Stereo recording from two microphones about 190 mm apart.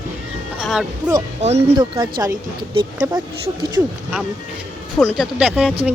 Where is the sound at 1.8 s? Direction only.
25° right (ahead or behind).